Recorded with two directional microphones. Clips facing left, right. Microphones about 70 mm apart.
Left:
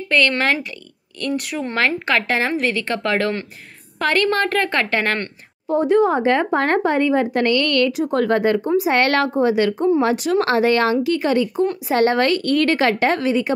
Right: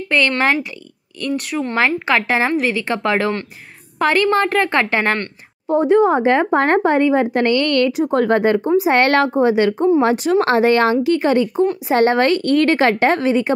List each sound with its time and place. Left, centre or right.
1.2 s speech: centre
1.8 s a woman's voice: centre; by 13.5 s right